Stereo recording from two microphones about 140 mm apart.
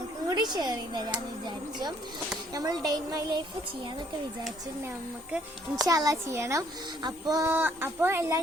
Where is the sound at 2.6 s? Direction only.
25° right (ahead or behind).